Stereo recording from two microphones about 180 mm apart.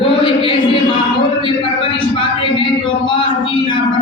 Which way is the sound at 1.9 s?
30° left (ahead or behind).